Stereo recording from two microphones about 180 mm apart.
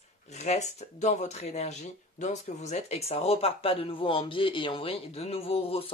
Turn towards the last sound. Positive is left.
turn(degrees=30)  # may be behind; listen again after turning